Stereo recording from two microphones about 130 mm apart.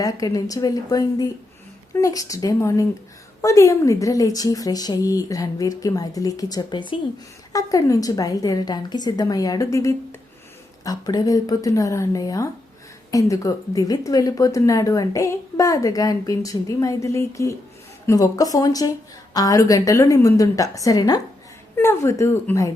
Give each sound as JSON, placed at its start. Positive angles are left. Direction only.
{"t": 0.0, "sound": "a woman's voice", "side_deg": 30}
{"t": 7.5, "sound": "a woman's voice", "side_deg": 25}